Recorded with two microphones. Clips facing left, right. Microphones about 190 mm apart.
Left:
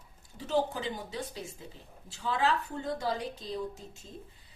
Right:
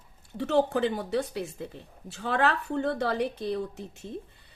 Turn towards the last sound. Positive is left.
turn(degrees=-65)  # may be behind; listen again after turning